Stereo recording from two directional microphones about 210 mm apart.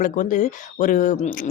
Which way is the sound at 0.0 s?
40° left (ahead or behind).